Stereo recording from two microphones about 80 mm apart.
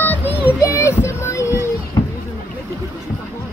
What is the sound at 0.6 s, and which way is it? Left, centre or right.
Child singing, left.